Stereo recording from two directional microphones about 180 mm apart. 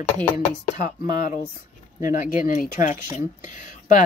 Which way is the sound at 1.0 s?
45° left (ahead or behind).